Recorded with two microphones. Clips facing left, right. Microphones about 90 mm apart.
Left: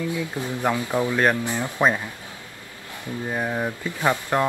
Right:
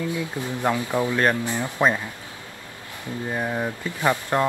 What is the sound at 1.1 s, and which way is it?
Speech, 15° left (ahead or behind).